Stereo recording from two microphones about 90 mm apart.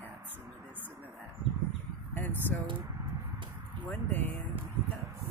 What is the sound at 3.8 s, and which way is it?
Speech, 20° left (ahead or behind).